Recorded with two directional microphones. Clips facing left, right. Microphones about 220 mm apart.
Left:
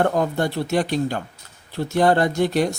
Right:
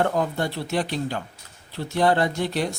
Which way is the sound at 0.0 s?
45° left (ahead or behind).